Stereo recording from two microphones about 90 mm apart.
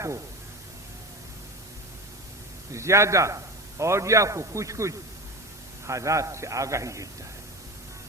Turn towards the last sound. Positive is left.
turn(degrees=-35)  # may be behind; listen again after turning